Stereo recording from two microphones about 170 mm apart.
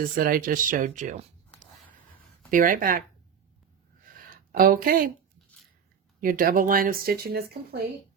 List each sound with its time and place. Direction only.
0.0 s speech: 55° right (ahead or behind)
2.5 s speech: 55° right (ahead or behind)
4.5 s speech: 55° right (ahead or behind)
6.1 s speech: 55° right (ahead or behind)